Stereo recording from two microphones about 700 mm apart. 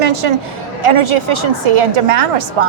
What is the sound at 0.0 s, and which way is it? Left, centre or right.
A woman's voice, right.